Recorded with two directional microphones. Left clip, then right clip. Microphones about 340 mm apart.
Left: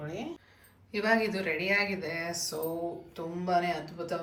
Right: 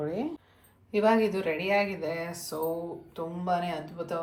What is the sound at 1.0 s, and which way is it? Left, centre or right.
Speech, centre.